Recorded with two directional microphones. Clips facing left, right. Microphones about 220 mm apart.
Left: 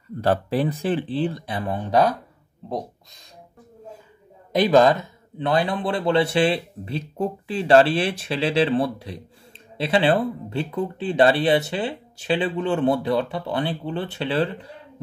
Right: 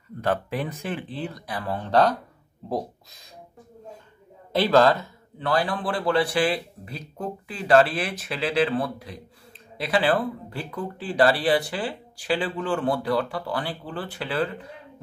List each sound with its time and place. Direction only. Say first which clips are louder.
0.2 s a man's voice: left 5 dB; 35° left (ahead or behind); by 2.1 s 10° left (ahead or behind)
4.5 s a man's voice: left 3 dB; 15° left (ahead or behind)